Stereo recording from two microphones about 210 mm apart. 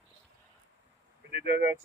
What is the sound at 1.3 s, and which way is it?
Speech, 50° right (ahead or behind).